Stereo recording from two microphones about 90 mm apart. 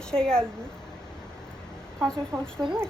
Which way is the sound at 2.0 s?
10° left (ahead or behind).